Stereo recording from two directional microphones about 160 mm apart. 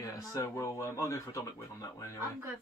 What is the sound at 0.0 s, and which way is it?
Speech, 20° left (ahead or behind).